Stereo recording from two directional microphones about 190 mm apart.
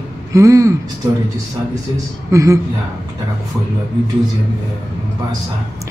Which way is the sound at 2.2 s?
15° right (ahead or behind).